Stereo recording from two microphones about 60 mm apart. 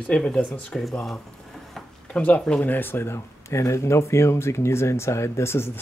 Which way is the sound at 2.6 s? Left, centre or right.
Left.